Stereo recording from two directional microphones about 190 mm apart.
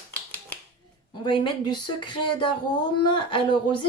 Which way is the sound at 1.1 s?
25° left (ahead or behind).